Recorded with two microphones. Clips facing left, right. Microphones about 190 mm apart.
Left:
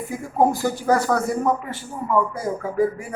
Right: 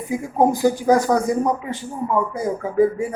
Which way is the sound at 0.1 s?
15° right (ahead or behind).